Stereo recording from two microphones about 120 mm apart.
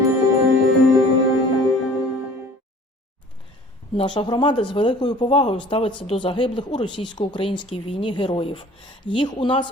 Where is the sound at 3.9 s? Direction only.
45° left (ahead or behind).